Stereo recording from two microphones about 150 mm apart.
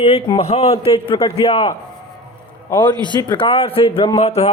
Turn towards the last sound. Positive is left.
turn(degrees=45)  # may be behind; listen again after turning